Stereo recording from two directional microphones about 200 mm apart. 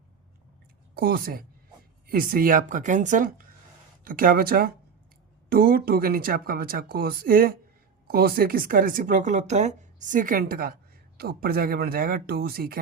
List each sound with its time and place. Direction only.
0.9 s speech: 50° right (ahead or behind)